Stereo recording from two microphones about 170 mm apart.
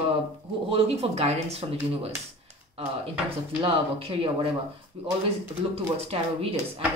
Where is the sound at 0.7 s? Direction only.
35° right (ahead or behind).